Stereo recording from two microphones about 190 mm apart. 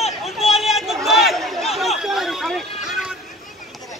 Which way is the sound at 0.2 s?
Centre (ahead or behind).